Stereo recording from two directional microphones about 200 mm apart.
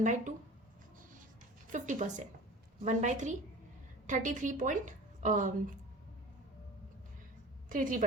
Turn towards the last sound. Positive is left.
turn(degrees=-40)  # may be behind; listen again after turning